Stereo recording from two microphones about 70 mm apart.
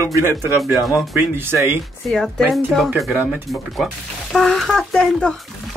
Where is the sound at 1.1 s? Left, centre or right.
Right.